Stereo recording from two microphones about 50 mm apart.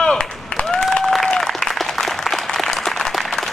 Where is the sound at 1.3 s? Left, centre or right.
Centre.